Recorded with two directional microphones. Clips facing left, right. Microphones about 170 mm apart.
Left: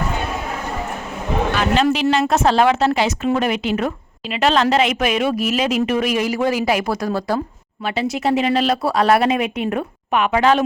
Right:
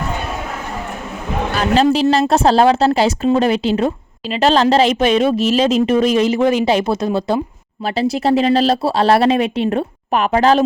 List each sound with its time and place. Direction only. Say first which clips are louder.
1.5 s speech: right 5 dB; 35° right (ahead or behind)
7.9 s speech: right 4 dB; 35° right (ahead or behind)